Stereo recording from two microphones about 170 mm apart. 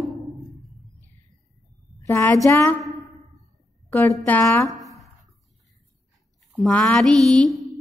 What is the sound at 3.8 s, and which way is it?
Speech, 15° left (ahead or behind).